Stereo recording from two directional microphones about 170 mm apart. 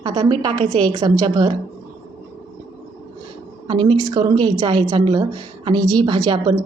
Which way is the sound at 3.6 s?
25° right (ahead or behind).